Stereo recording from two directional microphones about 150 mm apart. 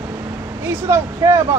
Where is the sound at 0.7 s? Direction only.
15° right (ahead or behind).